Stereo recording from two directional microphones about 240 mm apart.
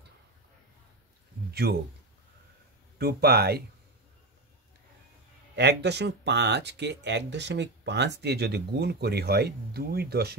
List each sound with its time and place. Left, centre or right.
1.5 s speech: right
3.0 s speech: right
5.6 s speech: right